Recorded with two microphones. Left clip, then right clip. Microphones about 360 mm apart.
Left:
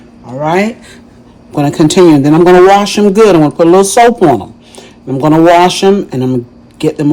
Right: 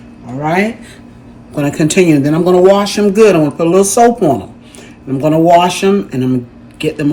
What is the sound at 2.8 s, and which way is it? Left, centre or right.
A man's voice, centre.